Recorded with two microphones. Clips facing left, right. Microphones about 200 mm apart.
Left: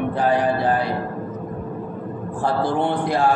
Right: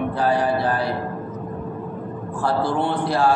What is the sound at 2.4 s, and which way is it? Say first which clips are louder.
Speech: left 1 dB; 20° left (ahead or behind).